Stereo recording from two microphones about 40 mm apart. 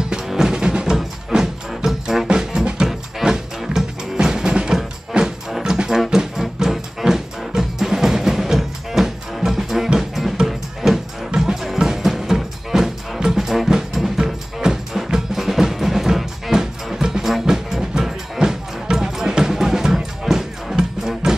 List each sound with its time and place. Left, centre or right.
0.3 s music: centre
2.2 s music: right
2.9 s music: centre; by 5.3 s right
5.6 s music: centre